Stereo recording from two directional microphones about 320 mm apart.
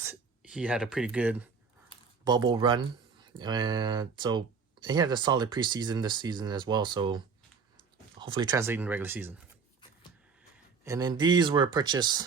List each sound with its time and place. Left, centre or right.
0.0 s speech: centre
8.2 s speech: centre
10.8 s speech: centre